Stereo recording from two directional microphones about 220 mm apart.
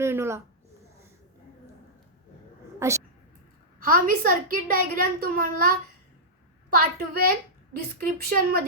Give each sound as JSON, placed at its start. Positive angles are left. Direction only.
{"t": 0.0, "sound": "a woman's voice", "side_deg": -10}
{"t": 2.7, "sound": "a woman's voice", "side_deg": -15}
{"t": 3.8, "sound": "a woman's voice", "side_deg": -40}